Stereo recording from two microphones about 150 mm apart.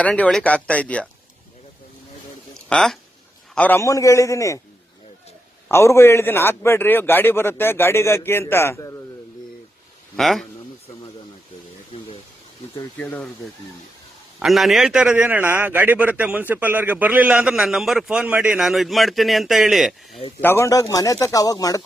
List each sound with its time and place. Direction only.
0.0 s a man's voice: 5° left (ahead or behind)
2.6 s speech: 5° left (ahead or behind); by 4.6 s 20° left (ahead or behind)
5.6 s a man's voice: 20° left (ahead or behind)
10.2 s a man's voice: centre (ahead or behind)
13.0 s a man's voice: 10° left (ahead or behind)
20.4 s speech: 15° left (ahead or behind)